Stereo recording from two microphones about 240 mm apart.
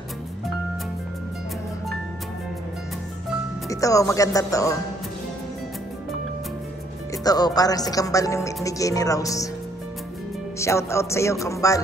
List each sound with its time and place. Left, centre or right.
3.6 s speech: centre
7.2 s speech: centre
10.6 s speech: centre